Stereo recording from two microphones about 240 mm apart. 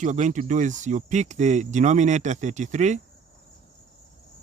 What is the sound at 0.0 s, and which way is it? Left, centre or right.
Speech, right.